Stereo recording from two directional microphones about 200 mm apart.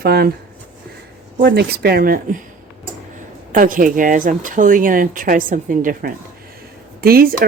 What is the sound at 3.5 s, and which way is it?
Speech, 40° right (ahead or behind).